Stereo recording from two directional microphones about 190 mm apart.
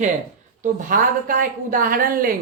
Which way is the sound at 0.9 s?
45° right (ahead or behind).